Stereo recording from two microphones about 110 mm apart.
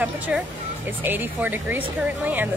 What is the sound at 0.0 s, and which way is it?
Speech, 15° right (ahead or behind).